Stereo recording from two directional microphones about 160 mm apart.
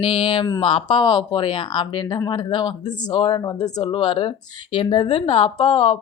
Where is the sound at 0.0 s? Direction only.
30° left (ahead or behind).